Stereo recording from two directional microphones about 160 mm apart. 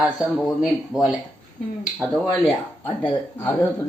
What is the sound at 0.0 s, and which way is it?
Speech, centre (ahead or behind).